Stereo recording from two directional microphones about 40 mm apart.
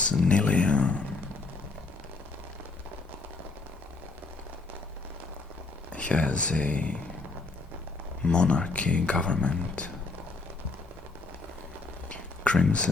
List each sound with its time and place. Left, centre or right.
0.0 s speech: left
5.9 s speech: left
8.2 s speech: left
12.0 s a sound: left